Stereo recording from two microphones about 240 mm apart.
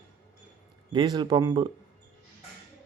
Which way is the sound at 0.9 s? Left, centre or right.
Centre.